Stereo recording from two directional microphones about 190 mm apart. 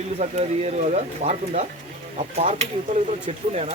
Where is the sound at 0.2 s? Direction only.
35° right (ahead or behind).